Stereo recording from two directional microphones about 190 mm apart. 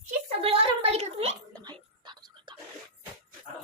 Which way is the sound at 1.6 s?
20° right (ahead or behind).